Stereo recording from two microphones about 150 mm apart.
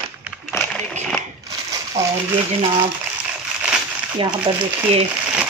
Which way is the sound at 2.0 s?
50° right (ahead or behind).